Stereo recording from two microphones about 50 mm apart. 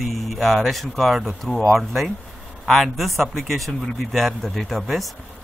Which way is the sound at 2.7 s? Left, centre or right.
Centre.